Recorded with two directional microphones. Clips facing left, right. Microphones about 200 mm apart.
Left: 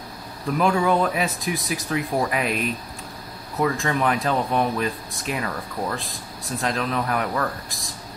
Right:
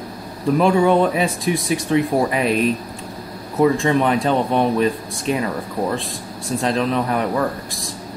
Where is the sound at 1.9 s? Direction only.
30° right (ahead or behind).